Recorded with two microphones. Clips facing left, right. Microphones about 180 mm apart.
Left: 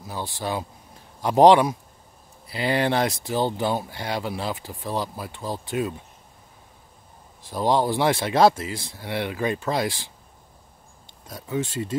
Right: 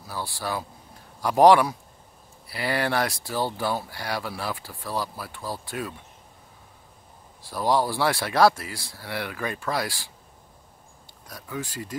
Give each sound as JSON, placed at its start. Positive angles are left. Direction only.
{"t": 0.0, "sound": "speech", "side_deg": 20}
{"t": 7.4, "sound": "speech", "side_deg": 20}
{"t": 11.2, "sound": "speech", "side_deg": 25}